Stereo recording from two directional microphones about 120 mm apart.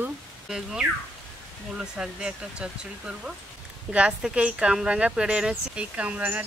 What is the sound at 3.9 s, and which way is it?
Speech, 10° right (ahead or behind).